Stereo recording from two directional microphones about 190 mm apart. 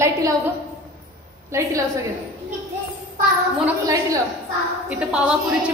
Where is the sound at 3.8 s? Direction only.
15° right (ahead or behind).